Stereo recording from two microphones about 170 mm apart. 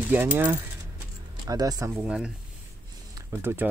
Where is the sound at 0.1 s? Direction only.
10° right (ahead or behind).